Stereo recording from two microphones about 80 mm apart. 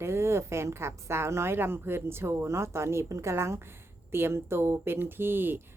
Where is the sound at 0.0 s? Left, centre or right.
Right.